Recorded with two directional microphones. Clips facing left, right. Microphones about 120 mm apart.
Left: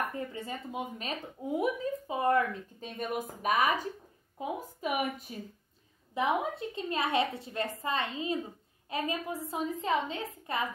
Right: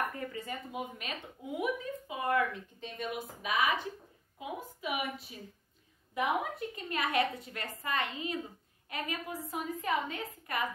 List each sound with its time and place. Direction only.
0.1 s a woman's voice: 25° left (ahead or behind); by 5.3 s 45° left (ahead or behind)
6.1 s a woman's voice: 25° left (ahead or behind)